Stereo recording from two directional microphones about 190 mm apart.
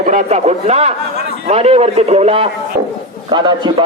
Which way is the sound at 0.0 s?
40° right (ahead or behind).